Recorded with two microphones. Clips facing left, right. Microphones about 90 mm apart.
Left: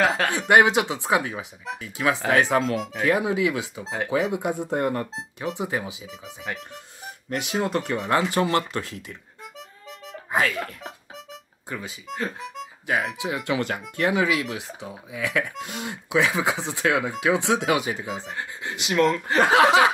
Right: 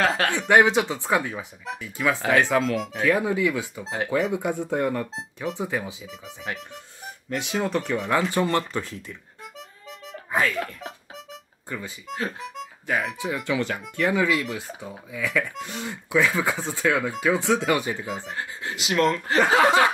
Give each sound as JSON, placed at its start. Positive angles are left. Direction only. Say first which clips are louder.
{"t": 0.0, "sound": "speech", "louder": "left 1 dB", "side_deg": 5}
{"t": 3.8, "sound": "speech", "louder": "even", "side_deg": 0}
{"t": 5.0, "sound": "speech", "louder": "even", "side_deg": 5}
{"t": 10.4, "sound": "speech", "louder": "even", "side_deg": 0}
{"t": 12.1, "sound": "speech", "louder": "even", "side_deg": 0}
{"t": 18.2, "sound": "speech", "louder": "even", "side_deg": 0}